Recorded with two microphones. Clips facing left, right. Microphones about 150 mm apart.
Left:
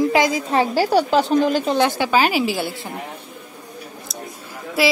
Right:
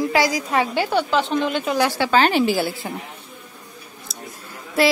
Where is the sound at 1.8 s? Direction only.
20° left (ahead or behind); by 2.9 s centre (ahead or behind).